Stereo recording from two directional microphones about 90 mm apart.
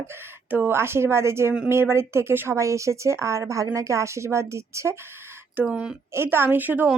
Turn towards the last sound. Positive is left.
turn(degrees=-20)  # may be behind; listen again after turning